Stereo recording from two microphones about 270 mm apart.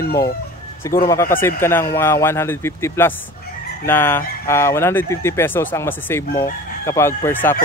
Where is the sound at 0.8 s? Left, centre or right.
Centre.